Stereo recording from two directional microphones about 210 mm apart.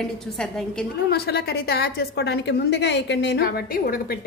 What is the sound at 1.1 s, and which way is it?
A woman's voice, 50° left (ahead or behind).